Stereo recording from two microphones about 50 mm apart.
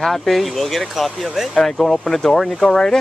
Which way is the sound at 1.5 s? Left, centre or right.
Centre.